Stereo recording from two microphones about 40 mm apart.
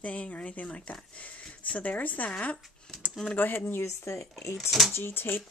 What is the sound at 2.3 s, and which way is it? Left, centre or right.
Speech, left.